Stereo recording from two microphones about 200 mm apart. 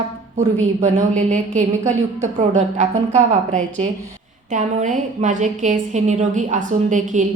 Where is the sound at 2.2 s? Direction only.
35° right (ahead or behind).